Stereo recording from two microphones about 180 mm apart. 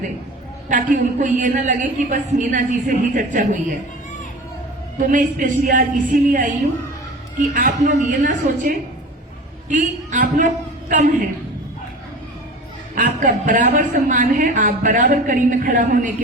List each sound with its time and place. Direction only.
0.7 s a woman's voice: 45° right (ahead or behind)
4.9 s a woman's voice: 45° right (ahead or behind)
13.0 s a woman's voice: 45° right (ahead or behind)